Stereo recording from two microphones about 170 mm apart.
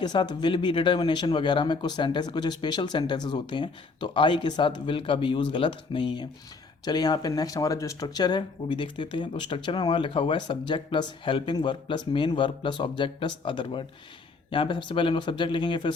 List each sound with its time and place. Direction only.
0.0 s speech: 25° left (ahead or behind)